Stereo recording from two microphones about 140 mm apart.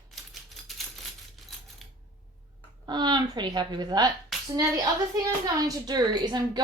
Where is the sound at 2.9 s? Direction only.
30° right (ahead or behind).